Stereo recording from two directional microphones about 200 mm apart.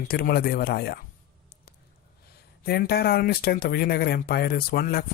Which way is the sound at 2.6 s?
50° left (ahead or behind).